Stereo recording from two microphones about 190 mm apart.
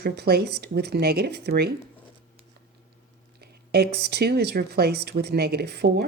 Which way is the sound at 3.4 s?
55° right (ahead or behind).